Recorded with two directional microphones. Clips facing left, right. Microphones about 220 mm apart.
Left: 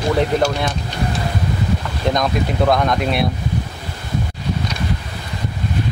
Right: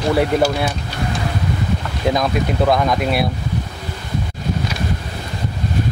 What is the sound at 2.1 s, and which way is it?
Speech, centre (ahead or behind).